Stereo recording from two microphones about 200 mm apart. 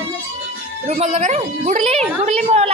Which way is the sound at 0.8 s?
35° right (ahead or behind).